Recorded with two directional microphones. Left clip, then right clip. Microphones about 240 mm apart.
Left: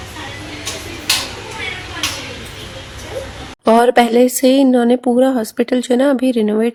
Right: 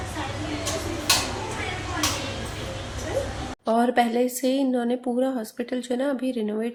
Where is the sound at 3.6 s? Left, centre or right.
Left.